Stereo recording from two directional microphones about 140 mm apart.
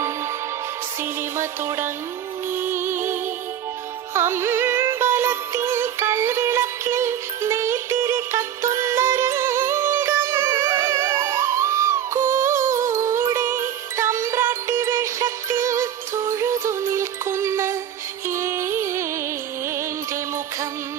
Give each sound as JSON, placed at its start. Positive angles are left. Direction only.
{"t": 1.4, "sound": "music", "side_deg": -20}